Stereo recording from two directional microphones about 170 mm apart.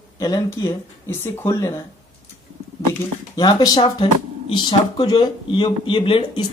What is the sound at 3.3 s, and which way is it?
Speech, 25° left (ahead or behind).